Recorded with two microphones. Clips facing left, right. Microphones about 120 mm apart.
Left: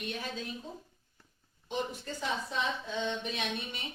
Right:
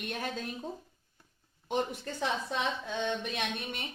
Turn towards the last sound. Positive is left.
turn(degrees=-55)  # may be behind; listen again after turning